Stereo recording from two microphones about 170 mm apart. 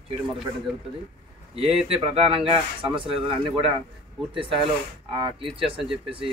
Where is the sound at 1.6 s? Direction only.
35° right (ahead or behind).